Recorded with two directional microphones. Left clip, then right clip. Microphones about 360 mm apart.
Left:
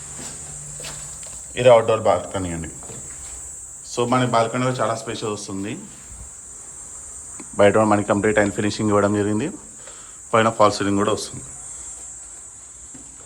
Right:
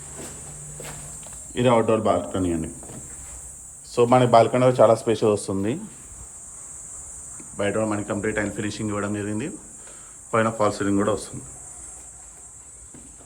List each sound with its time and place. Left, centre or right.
1.5 s speech: centre
3.8 s speech: centre
7.5 s speech: centre